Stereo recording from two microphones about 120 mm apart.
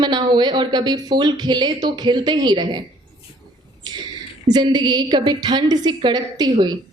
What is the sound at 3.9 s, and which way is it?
A woman's voice, 35° right (ahead or behind).